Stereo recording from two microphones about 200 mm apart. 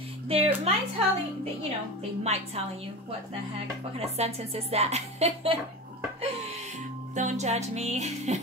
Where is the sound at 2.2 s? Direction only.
30° right (ahead or behind).